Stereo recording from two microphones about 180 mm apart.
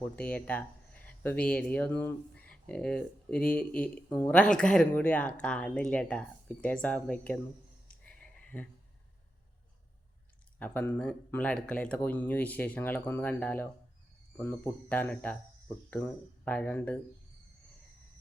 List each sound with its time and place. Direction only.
0.2 s speech: 10° left (ahead or behind)
7.9 s a sound: 5° left (ahead or behind)
10.6 s speech: 10° left (ahead or behind)